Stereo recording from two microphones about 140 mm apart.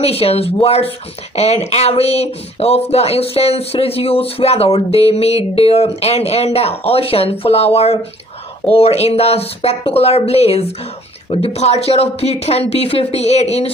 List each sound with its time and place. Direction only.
0.0 s speech: 45° left (ahead or behind)